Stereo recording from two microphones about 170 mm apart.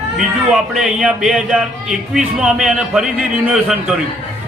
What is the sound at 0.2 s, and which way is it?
A man's voice, centre (ahead or behind).